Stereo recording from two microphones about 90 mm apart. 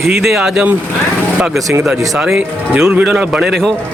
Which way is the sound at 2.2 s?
5° right (ahead or behind).